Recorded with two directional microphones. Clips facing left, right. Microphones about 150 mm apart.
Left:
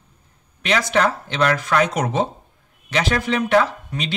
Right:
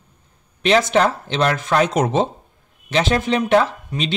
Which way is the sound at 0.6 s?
25° right (ahead or behind).